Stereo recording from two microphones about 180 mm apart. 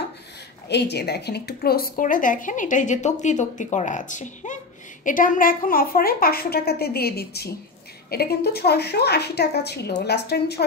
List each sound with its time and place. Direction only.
0.7 s a woman's voice: 65° left (ahead or behind)